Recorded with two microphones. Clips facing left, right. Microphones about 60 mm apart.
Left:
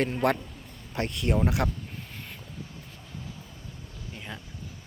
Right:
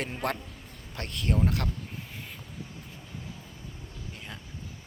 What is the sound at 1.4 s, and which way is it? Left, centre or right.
Speech, centre.